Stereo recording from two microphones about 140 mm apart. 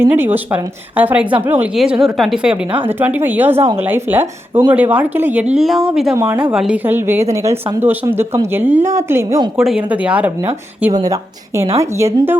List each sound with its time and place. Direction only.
0.0 s a woman's voice: 15° right (ahead or behind)
1.7 s a woman's voice: 5° right (ahead or behind)
6.1 s a woman's voice: 20° right (ahead or behind)
6.4 s a woman's voice: 5° right (ahead or behind)
9.6 s a woman's voice: 5° right (ahead or behind)
10.9 s a woman's voice: 25° right (ahead or behind)